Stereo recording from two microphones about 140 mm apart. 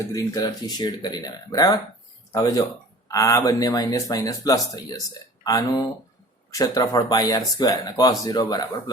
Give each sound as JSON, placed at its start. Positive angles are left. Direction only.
{"t": 0.0, "sound": "speech", "side_deg": 20}